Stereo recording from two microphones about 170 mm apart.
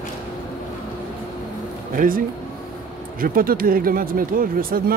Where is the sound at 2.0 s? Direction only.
55° right (ahead or behind).